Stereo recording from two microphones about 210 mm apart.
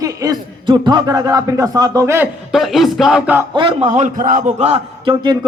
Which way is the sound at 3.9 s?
35° right (ahead or behind).